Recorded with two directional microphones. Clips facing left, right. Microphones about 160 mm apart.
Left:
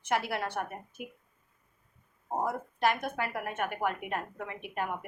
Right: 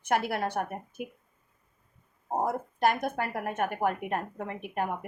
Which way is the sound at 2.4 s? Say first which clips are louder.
Right 3 dB; 45° right (ahead or behind).